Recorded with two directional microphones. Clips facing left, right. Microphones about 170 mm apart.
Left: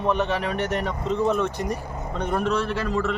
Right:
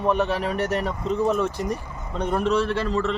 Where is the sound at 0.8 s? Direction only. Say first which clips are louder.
Even; centre (ahead or behind).